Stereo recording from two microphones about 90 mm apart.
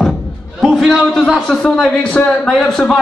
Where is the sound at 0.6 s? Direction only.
5° left (ahead or behind).